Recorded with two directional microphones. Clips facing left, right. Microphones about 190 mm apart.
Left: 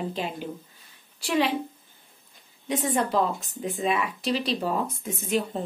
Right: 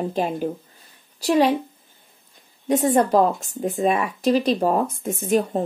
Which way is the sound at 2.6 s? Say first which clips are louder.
Right 8 dB; 45° right (ahead or behind).